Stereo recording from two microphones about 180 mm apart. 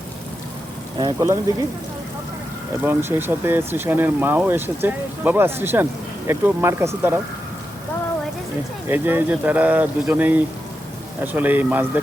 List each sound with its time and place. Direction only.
0.9 s speech: 20° right (ahead or behind)
2.8 s speech: 10° right (ahead or behind)
8.9 s speech: 10° right (ahead or behind)